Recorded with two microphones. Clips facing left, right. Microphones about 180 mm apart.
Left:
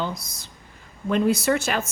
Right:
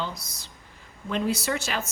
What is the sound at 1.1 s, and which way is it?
Speech, 55° left (ahead or behind).